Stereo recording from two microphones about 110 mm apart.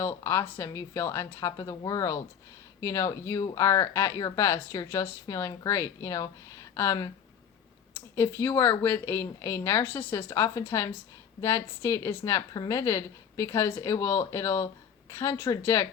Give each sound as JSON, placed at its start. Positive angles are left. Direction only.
{"t": 0.0, "sound": "speech", "side_deg": 25}